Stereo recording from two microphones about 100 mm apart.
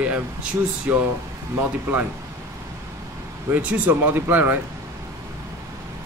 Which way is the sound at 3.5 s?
15° right (ahead or behind).